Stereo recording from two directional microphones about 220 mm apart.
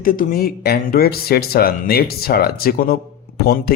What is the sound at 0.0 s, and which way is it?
Speech, 40° left (ahead or behind).